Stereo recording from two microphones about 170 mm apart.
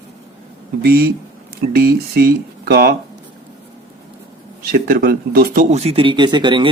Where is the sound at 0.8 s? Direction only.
65° right (ahead or behind).